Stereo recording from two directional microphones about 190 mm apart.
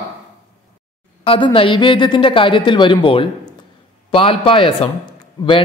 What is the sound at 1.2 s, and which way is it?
A man's voice, 30° left (ahead or behind).